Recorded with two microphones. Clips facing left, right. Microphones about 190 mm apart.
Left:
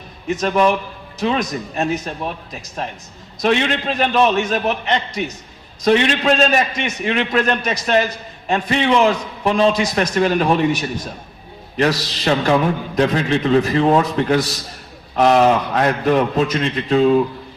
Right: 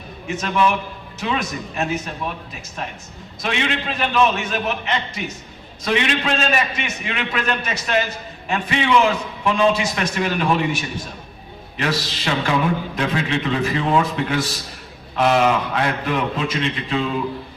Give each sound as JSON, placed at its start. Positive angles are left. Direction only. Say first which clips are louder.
{"t": 0.3, "sound": "a man's voice", "louder": "left 4 dB", "side_deg": 40}
{"t": 11.8, "sound": "a man's voice", "louder": "left 6 dB", "side_deg": 40}